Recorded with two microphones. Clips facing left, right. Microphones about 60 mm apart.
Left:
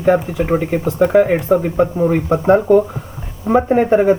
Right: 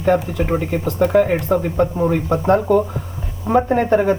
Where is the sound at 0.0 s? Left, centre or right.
Centre.